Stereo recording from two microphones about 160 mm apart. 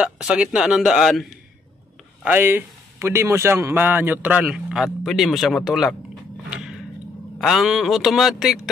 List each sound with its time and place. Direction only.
0.0 s a man's voice: 5° right (ahead or behind)
2.2 s a man's voice: 10° right (ahead or behind)
6.5 s a sound: 5° right (ahead or behind)
7.3 s a man's voice: 5° right (ahead or behind)